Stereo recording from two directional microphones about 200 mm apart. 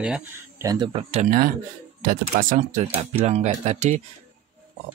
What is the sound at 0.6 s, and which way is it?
Speech, 25° right (ahead or behind).